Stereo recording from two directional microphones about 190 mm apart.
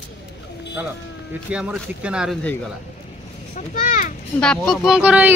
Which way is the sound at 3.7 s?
45° left (ahead or behind).